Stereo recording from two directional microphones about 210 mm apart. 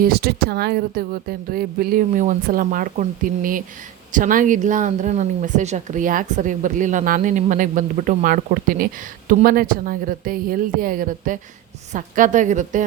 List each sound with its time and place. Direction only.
0.0 s speech: 50° right (ahead or behind)